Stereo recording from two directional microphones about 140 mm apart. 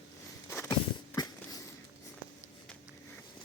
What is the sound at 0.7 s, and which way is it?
Walk, 30° left (ahead or behind).